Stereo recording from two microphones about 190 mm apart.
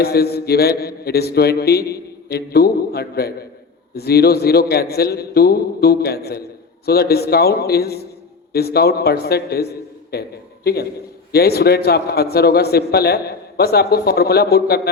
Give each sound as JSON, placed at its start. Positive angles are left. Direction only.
{"t": 0.0, "sound": "a man's voice", "side_deg": 55}